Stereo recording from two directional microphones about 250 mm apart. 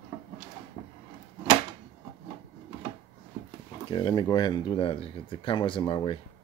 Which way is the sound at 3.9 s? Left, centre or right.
Centre.